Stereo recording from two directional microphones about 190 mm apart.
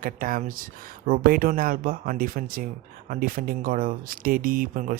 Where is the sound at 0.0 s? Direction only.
50° right (ahead or behind).